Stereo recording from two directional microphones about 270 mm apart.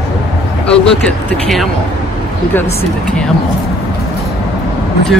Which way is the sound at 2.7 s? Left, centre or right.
Centre.